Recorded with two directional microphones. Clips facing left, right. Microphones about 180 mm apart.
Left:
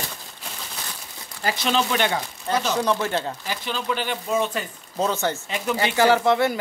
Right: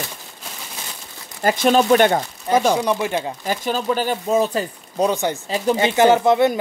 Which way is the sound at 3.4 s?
45° right (ahead or behind).